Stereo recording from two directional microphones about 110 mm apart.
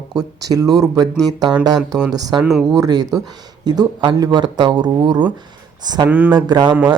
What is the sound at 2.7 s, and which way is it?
Speech, 35° right (ahead or behind).